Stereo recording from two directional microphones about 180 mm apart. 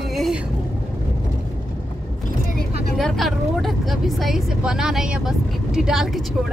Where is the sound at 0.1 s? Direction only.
Centre (ahead or behind).